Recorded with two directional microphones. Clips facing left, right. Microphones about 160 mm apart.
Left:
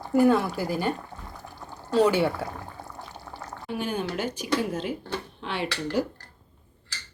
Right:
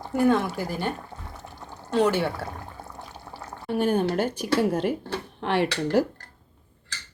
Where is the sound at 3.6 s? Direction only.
55° right (ahead or behind).